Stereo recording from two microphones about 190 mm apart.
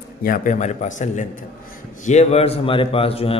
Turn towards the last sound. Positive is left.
turn(degrees=30)  # may be behind; listen again after turning